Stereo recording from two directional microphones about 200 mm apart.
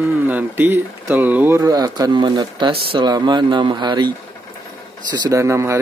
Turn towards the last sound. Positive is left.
turn(degrees=-15)  # may be behind; listen again after turning